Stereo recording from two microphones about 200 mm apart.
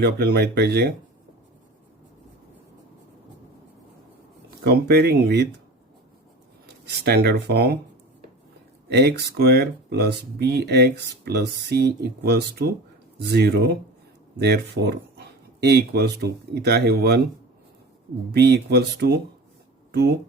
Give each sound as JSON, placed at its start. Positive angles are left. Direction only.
{"t": 0.0, "sound": "speech", "side_deg": -55}
{"t": 4.6, "sound": "speech", "side_deg": -55}
{"t": 6.8, "sound": "speech", "side_deg": -55}
{"t": 8.9, "sound": "speech", "side_deg": -55}
{"t": 18.3, "sound": "speech", "side_deg": -55}